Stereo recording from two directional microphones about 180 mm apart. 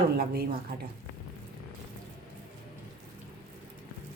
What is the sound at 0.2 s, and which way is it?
Speech, 60° right (ahead or behind).